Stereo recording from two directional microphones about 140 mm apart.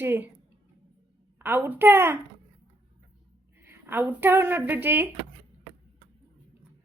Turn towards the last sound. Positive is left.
turn(degrees=-15)  # may be behind; listen again after turning